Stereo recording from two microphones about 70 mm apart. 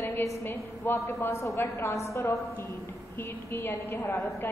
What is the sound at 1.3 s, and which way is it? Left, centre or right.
Speech, left.